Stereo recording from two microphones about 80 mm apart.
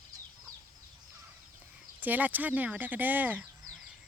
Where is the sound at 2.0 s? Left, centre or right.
Right.